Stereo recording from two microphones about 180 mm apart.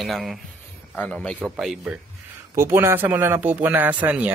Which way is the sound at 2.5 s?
15° right (ahead or behind).